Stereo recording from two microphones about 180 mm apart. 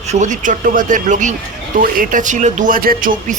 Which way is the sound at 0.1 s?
40° right (ahead or behind).